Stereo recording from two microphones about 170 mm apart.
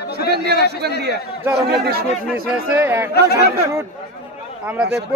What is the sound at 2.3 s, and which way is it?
Speech, 10° right (ahead or behind).